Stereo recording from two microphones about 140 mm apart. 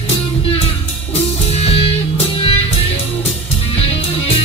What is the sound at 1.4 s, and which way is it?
Music, 45° left (ahead or behind).